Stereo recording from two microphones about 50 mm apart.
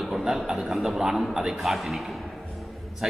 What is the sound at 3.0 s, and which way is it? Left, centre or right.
Speech, centre.